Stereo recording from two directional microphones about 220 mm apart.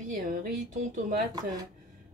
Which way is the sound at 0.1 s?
40° right (ahead or behind).